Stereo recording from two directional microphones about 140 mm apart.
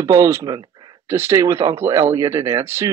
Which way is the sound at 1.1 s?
20° right (ahead or behind).